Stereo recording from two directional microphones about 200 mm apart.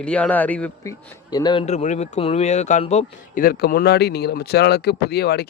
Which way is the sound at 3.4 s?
50° left (ahead or behind).